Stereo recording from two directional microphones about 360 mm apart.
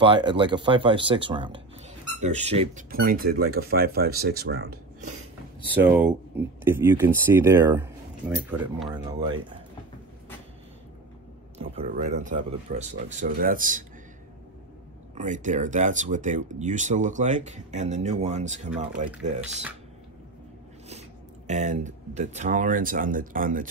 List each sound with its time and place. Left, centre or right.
0.0 s speech: centre
5.8 s speech: centre
11.5 s speech: centre
15.1 s speech: right
21.5 s speech: centre